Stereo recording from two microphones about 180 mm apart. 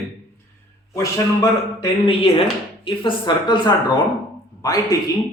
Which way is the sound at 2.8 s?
25° left (ahead or behind).